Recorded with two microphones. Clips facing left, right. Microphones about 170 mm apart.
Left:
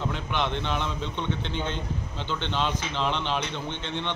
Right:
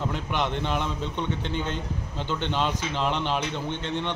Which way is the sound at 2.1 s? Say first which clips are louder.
Right 2 dB; 10° right (ahead or behind).